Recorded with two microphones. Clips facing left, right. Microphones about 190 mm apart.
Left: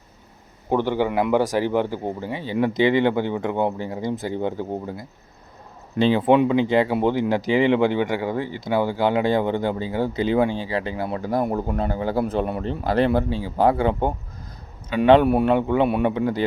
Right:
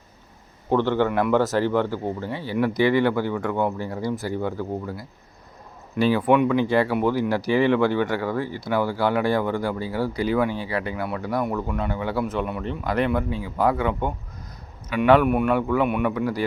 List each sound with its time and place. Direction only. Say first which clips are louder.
0.7 s speech: even; 15° left (ahead or behind)